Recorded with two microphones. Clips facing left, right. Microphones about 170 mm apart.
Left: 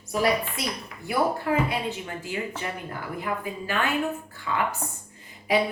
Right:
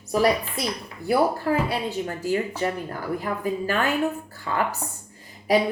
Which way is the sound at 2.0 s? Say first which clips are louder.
Right 8 dB; 40° right (ahead or behind).